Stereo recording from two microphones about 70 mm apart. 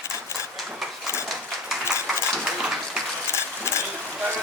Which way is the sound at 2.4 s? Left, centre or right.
Centre.